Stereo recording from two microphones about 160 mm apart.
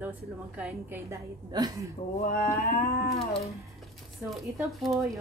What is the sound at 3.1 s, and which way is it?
Music, 40° left (ahead or behind).